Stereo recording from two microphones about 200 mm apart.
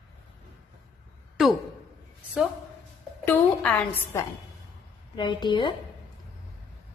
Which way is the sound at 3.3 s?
5° left (ahead or behind).